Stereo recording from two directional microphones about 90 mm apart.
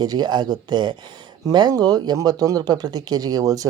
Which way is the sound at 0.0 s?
50° right (ahead or behind).